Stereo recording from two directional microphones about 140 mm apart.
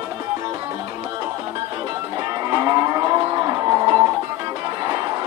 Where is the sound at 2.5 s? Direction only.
25° right (ahead or behind).